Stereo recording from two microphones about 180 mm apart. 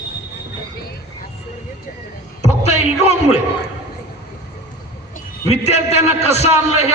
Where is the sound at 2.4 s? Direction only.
35° left (ahead or behind).